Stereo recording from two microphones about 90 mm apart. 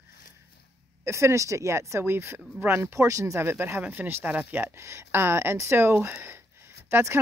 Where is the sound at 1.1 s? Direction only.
30° right (ahead or behind).